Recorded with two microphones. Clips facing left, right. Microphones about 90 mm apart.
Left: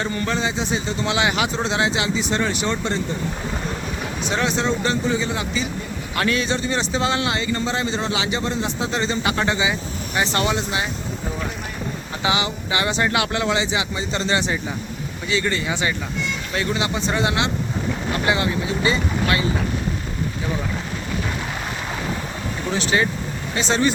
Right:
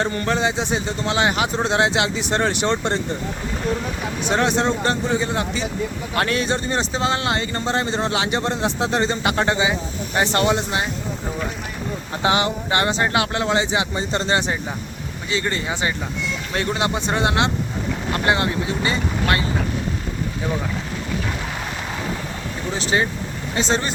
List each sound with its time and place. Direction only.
0.0 s speech: 50° right (ahead or behind)
1.0 s speech: 40° right (ahead or behind); by 3.0 s 60° right (ahead or behind)
4.3 s a man's voice: 55° right (ahead or behind)
9.3 s a man's voice: 40° right (ahead or behind)
12.2 s a man's voice: 50° right (ahead or behind)
12.9 s a man's voice: 30° right (ahead or behind)
16.6 s a man's voice: 50° right (ahead or behind)
22.9 s speech: 30° right (ahead or behind)